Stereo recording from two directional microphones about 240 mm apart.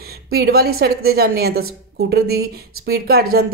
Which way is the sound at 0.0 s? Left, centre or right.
Right.